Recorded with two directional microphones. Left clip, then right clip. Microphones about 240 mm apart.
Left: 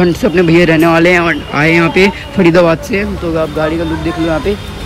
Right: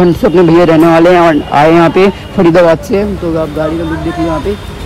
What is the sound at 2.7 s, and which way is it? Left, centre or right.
Speech, centre.